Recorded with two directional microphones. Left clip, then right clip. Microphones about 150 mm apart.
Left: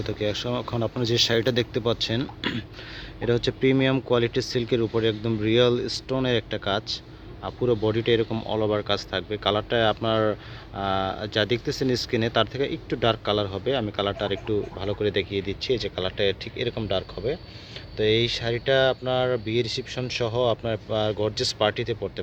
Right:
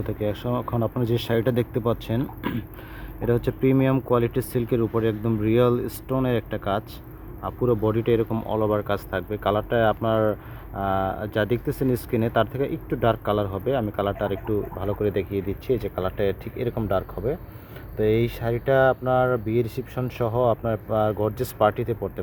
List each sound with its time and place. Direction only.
0.0 s speech: 10° right (ahead or behind)
18.4 s speech: 5° right (ahead or behind)